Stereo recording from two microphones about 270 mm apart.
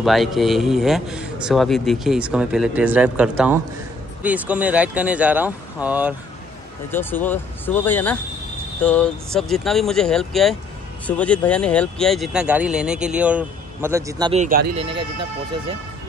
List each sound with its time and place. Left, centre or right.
0.0 s a man's voice: centre
6.9 s a man's voice: centre
14.4 s speech: right